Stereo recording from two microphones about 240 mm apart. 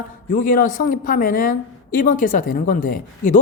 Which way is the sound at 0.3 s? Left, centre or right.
Left.